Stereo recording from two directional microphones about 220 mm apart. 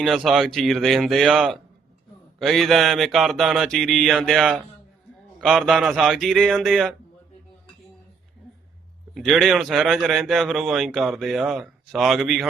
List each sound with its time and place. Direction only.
0.0 s a man's voice: centre (ahead or behind)
9.1 s a man's voice: centre (ahead or behind)